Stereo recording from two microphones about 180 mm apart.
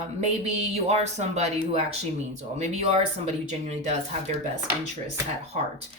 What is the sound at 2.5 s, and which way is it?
Speech, 40° right (ahead or behind).